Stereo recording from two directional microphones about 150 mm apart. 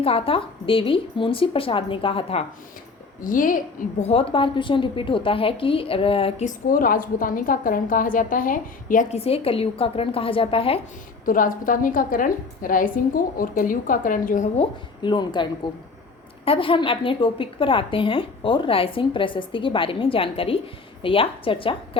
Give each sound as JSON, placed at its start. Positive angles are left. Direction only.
{"t": 0.0, "sound": "a woman's voice", "side_deg": 40}
{"t": 3.2, "sound": "a woman's voice", "side_deg": 65}
{"t": 4.0, "sound": "a woman's voice", "side_deg": 40}
{"t": 6.7, "sound": "a woman's voice", "side_deg": 70}
{"t": 9.1, "sound": "a woman's voice", "side_deg": 40}
{"t": 11.3, "sound": "a woman's voice", "side_deg": 65}
{"t": 14.6, "sound": "a woman's voice", "side_deg": 30}
{"t": 16.5, "sound": "a woman's voice", "side_deg": 35}